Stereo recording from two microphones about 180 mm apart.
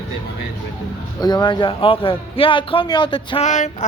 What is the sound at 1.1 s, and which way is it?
A man's voice, 25° left (ahead or behind).